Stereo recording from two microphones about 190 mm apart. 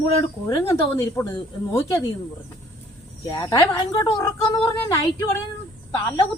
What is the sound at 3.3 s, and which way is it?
Speech, 20° left (ahead or behind).